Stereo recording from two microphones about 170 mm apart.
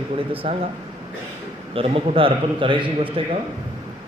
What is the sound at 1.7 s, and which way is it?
A man's voice, 35° right (ahead or behind).